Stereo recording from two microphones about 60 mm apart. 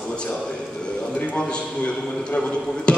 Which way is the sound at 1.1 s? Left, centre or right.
Centre.